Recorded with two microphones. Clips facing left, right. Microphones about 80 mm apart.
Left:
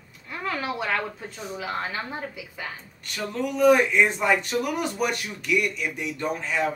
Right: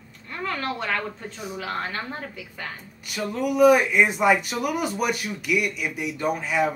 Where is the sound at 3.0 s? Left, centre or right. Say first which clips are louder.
Right 2 dB; centre.